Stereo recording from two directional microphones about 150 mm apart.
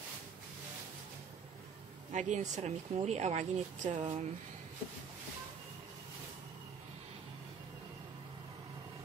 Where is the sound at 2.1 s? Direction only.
55° right (ahead or behind).